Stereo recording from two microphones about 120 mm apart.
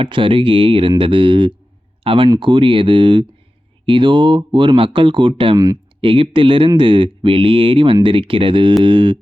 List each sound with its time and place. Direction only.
0.0 s speech: 45° right (ahead or behind)